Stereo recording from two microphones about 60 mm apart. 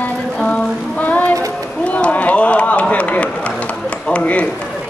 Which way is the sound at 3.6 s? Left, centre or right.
Left.